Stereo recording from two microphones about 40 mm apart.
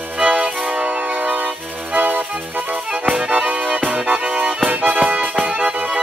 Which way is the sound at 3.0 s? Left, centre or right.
Right.